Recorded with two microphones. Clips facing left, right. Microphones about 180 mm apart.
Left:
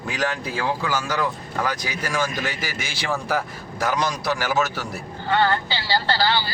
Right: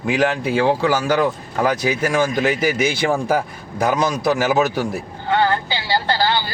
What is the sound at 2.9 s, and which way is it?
A man's voice, 50° right (ahead or behind).